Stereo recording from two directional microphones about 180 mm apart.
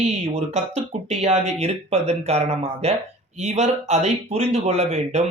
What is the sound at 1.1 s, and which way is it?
Speech, 35° right (ahead or behind).